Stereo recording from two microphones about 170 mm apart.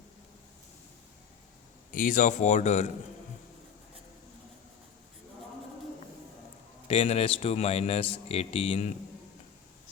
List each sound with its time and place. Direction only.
1.9 s a man's voice: 55° left (ahead or behind)
6.8 s a man's voice: 35° left (ahead or behind)